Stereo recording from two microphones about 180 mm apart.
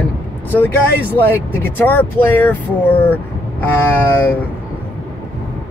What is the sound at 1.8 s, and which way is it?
Speech, 10° left (ahead or behind).